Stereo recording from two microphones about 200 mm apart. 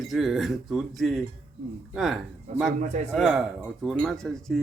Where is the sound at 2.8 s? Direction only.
35° right (ahead or behind).